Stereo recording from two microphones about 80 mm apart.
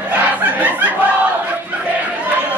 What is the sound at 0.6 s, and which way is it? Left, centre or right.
Snicker, centre.